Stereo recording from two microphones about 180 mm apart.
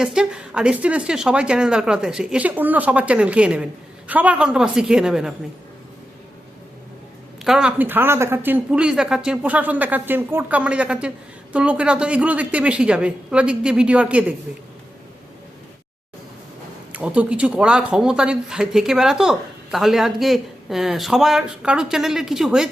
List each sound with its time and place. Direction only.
0.0 s speech: 5° right (ahead or behind)
7.4 s a woman's voice: 5° right (ahead or behind)
16.9 s speech: 10° right (ahead or behind)